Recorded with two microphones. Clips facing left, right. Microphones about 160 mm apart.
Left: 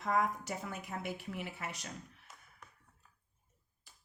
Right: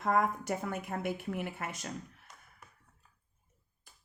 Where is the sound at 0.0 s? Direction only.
50° right (ahead or behind).